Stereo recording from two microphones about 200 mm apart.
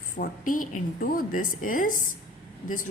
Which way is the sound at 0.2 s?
45° left (ahead or behind).